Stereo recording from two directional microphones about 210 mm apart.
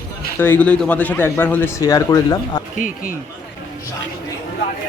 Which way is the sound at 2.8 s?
40° left (ahead or behind).